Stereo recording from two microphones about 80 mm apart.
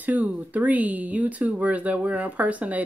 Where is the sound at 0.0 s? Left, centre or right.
Centre.